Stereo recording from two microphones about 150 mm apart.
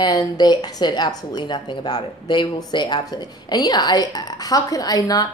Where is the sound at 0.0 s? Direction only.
25° left (ahead or behind).